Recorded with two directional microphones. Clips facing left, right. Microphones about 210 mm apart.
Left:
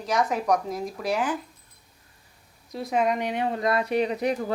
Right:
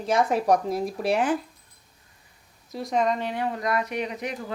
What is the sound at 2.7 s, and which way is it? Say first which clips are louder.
Speech: even; 5° left (ahead or behind).